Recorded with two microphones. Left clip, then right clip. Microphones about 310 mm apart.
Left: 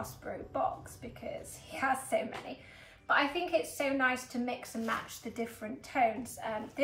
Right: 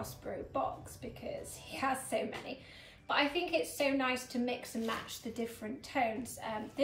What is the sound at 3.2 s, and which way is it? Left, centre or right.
A woman's voice, centre.